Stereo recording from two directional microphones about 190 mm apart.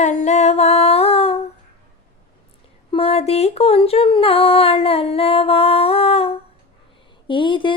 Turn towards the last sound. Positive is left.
turn(degrees=25)  # may be behind; listen again after turning